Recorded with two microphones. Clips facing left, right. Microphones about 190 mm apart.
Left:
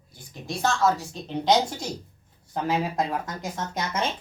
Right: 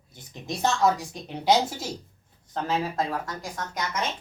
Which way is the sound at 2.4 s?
10° left (ahead or behind).